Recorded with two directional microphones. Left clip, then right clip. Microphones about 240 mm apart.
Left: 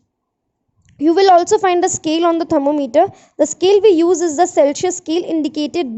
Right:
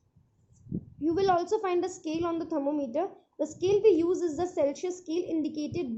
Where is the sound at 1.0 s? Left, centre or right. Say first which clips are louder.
Left 16 dB; left.